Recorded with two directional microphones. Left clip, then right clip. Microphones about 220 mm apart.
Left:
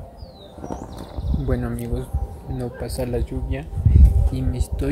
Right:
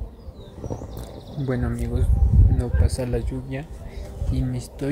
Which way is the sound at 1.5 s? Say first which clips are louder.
Left 1 dB; centre (ahead or behind).